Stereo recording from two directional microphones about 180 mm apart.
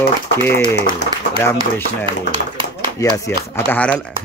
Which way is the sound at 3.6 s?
10° left (ahead or behind).